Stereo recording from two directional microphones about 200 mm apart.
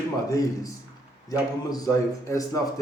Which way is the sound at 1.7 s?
15° left (ahead or behind).